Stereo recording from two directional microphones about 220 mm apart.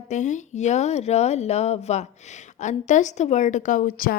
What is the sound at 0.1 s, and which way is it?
Speech, 35° left (ahead or behind).